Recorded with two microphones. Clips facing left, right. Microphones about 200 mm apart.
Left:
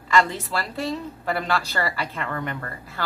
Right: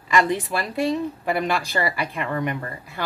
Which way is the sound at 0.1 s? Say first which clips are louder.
Right 1 dB; 15° right (ahead or behind).